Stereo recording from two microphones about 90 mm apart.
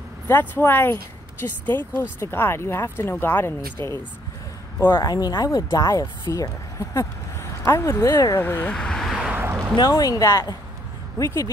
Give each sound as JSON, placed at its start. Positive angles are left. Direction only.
{"t": 0.3, "sound": "speech", "side_deg": 20}
{"t": 5.0, "sound": "speech", "side_deg": 45}
{"t": 8.4, "sound": "speech", "side_deg": 25}
{"t": 8.7, "sound": "vehicle", "side_deg": 5}
{"t": 9.3, "sound": "a sound", "side_deg": -25}
{"t": 9.8, "sound": "speech", "side_deg": 45}